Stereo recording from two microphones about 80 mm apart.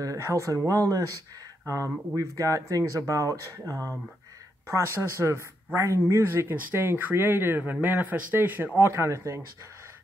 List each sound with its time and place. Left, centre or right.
0.0 s speech: right
8.7 s speech: right